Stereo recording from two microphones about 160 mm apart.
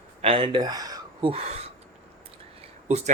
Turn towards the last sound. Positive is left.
turn(degrees=-45)  # may be behind; listen again after turning